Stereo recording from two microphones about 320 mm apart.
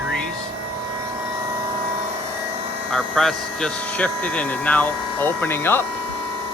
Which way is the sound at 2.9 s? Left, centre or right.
Centre.